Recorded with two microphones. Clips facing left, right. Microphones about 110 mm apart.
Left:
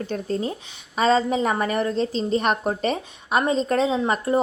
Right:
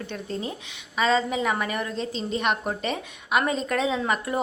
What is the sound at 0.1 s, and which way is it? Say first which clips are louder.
Speech: left 6 dB; 40° left (ahead or behind).